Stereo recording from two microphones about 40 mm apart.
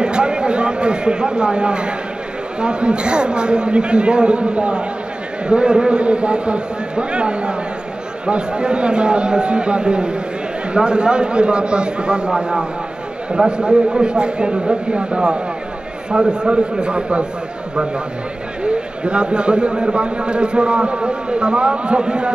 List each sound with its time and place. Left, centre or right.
0.0 s a man's voice: right
18.6 s a man's voice: right